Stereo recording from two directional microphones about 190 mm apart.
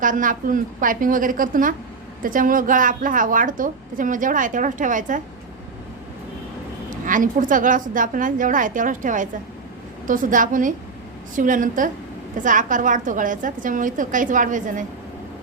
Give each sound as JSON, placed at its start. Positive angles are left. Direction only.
{"t": 0.0, "sound": "a woman's voice", "side_deg": -45}
{"t": 7.0, "sound": "a woman's voice", "side_deg": -45}